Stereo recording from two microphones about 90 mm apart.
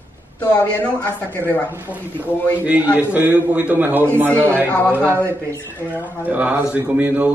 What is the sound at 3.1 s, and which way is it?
A man's voice, 20° right (ahead or behind).